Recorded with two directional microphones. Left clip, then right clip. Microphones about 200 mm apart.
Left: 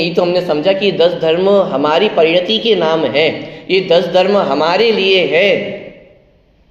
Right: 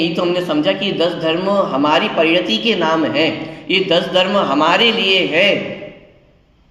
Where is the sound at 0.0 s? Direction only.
20° left (ahead or behind).